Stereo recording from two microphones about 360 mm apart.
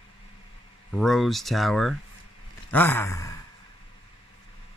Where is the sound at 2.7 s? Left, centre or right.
Centre.